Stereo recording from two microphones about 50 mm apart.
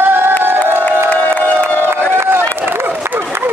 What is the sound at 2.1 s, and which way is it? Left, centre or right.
Run, right.